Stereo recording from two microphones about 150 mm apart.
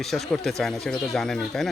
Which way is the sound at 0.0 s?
Centre (ahead or behind).